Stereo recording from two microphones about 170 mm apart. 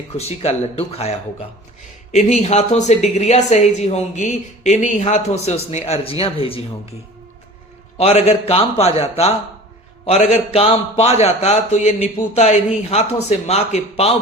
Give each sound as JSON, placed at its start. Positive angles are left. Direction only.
{"t": 0.2, "sound": "a woman's voice", "side_deg": 40}
{"t": 2.1, "sound": "a woman's voice", "side_deg": 40}
{"t": 7.9, "sound": "a woman's voice", "side_deg": 40}